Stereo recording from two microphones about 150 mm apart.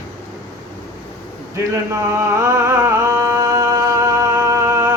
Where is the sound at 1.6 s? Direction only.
20° right (ahead or behind).